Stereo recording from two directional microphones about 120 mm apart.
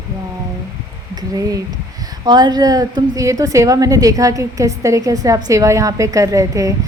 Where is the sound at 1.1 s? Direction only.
30° right (ahead or behind).